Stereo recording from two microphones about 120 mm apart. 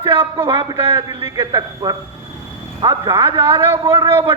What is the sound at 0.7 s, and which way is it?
Speech, 25° right (ahead or behind).